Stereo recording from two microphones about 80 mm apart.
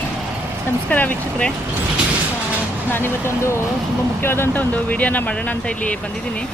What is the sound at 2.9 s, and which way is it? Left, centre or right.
Speech, left.